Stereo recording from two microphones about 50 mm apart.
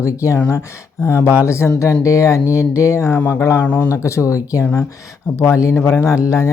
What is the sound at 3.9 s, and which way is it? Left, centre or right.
Speech, left.